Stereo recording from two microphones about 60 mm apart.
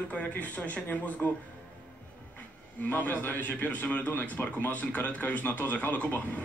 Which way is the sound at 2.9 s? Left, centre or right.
Left.